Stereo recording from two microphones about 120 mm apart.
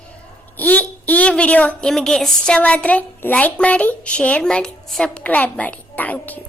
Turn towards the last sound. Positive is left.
turn(degrees=15)  # may be behind; listen again after turning